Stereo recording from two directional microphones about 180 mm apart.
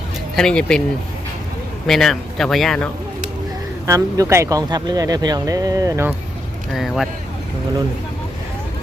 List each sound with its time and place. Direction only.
0.3 s a man's voice: 5° left (ahead or behind)
1.9 s a man's voice: centre (ahead or behind)
3.8 s speech: 15° right (ahead or behind)
6.7 s a man's voice: centre (ahead or behind)